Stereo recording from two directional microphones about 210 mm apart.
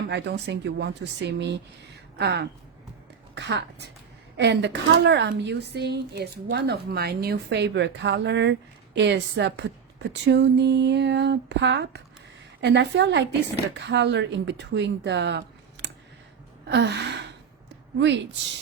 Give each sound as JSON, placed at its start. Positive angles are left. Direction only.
{"t": 0.1, "sound": "a woman's voice", "side_deg": -55}
{"t": 16.6, "sound": "gasp", "side_deg": -55}